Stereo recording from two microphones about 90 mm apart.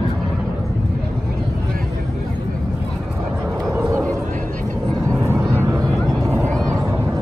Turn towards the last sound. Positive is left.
turn(degrees=0)  # may be behind; listen again after turning